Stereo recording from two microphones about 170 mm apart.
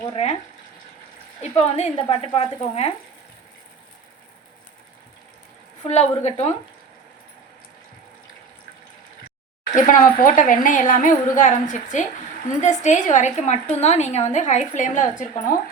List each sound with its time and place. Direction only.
0.0 s speech: 35° left (ahead or behind)
1.4 s speech: 40° left (ahead or behind)
5.8 s speech: 40° left (ahead or behind)
9.7 s a woman's voice: 50° left (ahead or behind)